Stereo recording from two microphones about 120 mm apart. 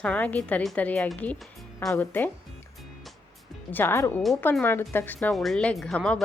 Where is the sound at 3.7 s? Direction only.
20° left (ahead or behind).